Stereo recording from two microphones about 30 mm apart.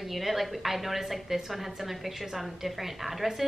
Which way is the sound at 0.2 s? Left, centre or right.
Centre.